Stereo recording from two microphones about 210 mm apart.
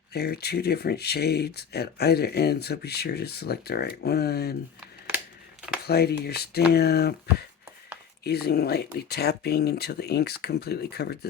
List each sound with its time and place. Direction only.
0.1 s speech: 50° left (ahead or behind)
5.8 s speech: 50° left (ahead or behind)